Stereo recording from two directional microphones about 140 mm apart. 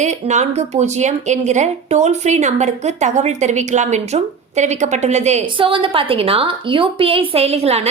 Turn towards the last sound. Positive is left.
turn(degrees=-50)  # may be behind; listen again after turning